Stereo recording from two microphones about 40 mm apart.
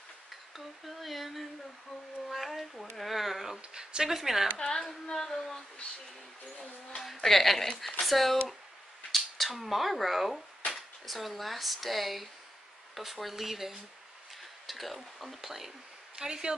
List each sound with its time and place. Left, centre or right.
0.6 s speech: centre
3.7 s speech: centre
4.6 s female singing: centre
5.1 s a sound: centre
7.0 s speech: centre
16.2 s speech: centre